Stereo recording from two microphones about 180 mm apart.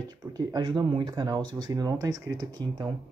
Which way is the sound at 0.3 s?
20° right (ahead or behind).